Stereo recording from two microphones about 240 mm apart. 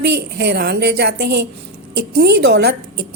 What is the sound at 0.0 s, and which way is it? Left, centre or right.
A woman's voice, right.